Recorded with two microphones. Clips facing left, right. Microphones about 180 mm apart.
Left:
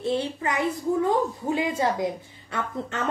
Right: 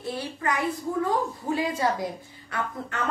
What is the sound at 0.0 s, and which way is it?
A woman's voice, 25° left (ahead or behind).